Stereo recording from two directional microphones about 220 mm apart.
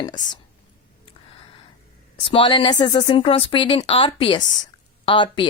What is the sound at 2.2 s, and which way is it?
Speech, 20° left (ahead or behind).